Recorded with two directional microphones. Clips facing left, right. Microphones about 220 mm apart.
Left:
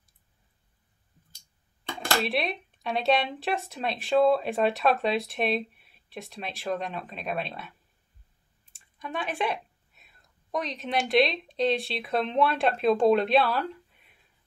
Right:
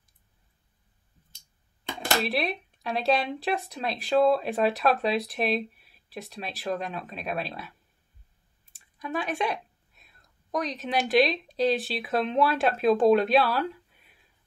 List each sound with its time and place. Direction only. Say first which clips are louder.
2.0 s speech: even; centre (ahead or behind)